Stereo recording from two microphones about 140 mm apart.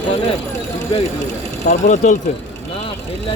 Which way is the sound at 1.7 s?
60° left (ahead or behind).